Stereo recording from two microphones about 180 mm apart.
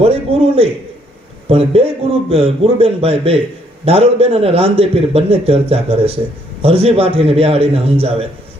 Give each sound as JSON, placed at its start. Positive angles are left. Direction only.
{"t": 0.0, "sound": "a man's voice", "side_deg": -35}